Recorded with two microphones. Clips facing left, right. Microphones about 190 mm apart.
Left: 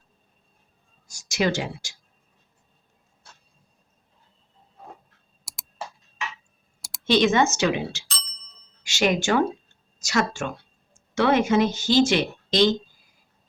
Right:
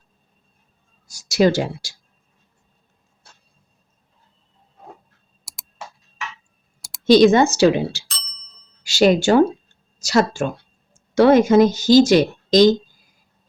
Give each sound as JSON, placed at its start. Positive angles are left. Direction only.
{"t": 1.0, "sound": "speech", "side_deg": -35}
{"t": 5.5, "sound": "computer keyboard", "side_deg": 0}
{"t": 7.0, "sound": "speech", "side_deg": -35}
{"t": 8.0, "sound": "bicycle bell", "side_deg": 0}
{"t": 8.8, "sound": "speech", "side_deg": -35}